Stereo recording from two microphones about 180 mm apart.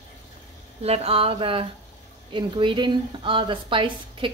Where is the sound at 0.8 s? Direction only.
35° right (ahead or behind).